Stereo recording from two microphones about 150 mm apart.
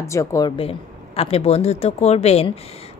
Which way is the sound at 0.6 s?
40° left (ahead or behind).